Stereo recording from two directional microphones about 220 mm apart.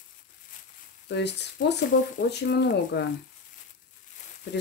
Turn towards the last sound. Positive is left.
turn(degrees=50)  # may be behind; listen again after turning